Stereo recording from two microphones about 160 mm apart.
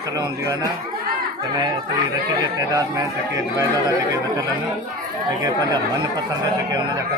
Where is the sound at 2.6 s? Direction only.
20° right (ahead or behind).